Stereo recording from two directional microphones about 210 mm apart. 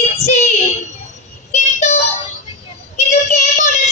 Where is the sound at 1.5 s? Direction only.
35° left (ahead or behind).